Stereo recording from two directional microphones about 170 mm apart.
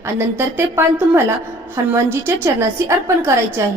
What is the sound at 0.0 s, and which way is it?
A woman's voice, 15° right (ahead or behind).